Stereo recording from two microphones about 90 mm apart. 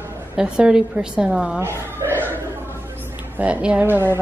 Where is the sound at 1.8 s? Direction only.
25° right (ahead or behind).